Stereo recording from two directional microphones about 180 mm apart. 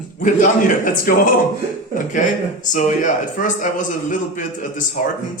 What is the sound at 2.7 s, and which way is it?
Speech, 45° left (ahead or behind).